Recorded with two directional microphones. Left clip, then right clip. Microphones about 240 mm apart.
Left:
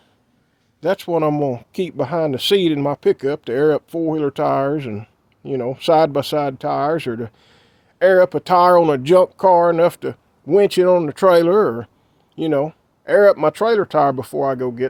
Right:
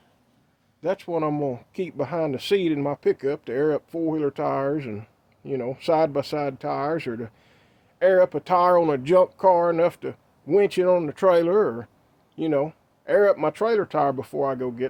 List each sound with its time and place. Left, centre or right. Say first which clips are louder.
0.8 s speech: left 7 dB; left